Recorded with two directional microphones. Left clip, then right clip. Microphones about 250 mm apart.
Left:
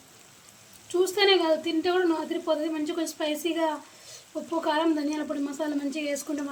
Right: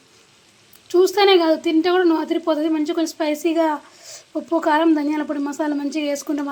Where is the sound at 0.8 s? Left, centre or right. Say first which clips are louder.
Right 8 dB; centre.